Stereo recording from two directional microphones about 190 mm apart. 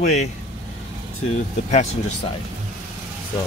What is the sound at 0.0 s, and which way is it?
Speech, 40° left (ahead or behind).